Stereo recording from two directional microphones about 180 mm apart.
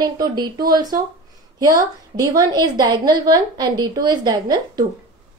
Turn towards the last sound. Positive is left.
turn(degrees=-20)  # may be behind; listen again after turning